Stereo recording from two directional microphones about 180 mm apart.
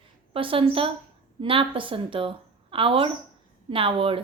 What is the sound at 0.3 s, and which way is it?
A woman's voice, 30° right (ahead or behind).